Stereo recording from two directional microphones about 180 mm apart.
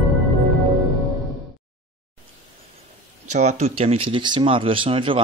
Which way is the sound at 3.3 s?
40° right (ahead or behind).